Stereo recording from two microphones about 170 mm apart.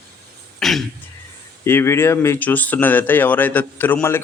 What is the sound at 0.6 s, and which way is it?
Throat clearing, centre (ahead or behind).